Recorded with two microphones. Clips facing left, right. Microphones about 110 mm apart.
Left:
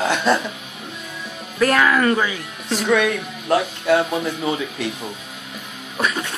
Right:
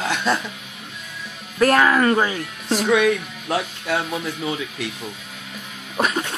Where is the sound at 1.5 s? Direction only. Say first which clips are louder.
Right 1 dB; 35° right (ahead or behind).